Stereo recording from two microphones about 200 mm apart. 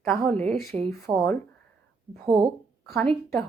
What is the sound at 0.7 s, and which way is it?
Speech, 20° right (ahead or behind).